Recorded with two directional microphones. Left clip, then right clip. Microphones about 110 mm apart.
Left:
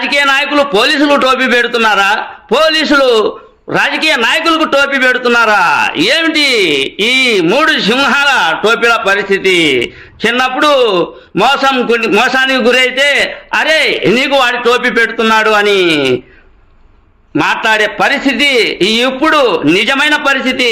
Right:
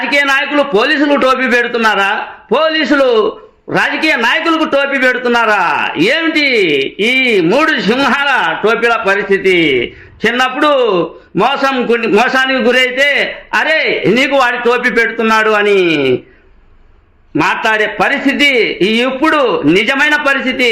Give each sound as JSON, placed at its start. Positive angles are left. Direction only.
{"t": 0.0, "sound": "a man's voice", "side_deg": 5}
{"t": 14.6, "sound": "a man's voice", "side_deg": 20}
{"t": 17.3, "sound": "a man's voice", "side_deg": 15}